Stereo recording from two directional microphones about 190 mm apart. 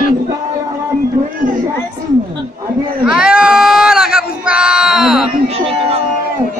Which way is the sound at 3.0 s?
5° right (ahead or behind).